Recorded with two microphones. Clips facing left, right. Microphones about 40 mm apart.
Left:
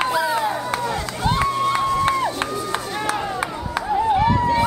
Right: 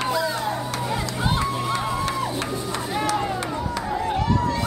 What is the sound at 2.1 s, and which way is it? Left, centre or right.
Crowd, left.